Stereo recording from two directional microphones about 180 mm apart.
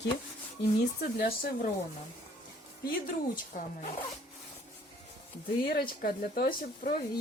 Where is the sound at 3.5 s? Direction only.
50° left (ahead or behind).